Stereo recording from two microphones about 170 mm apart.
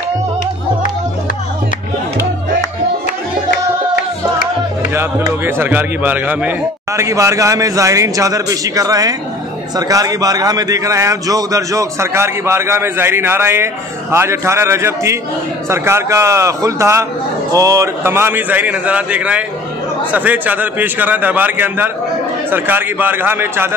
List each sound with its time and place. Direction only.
4.9 s a man's voice: 15° right (ahead or behind)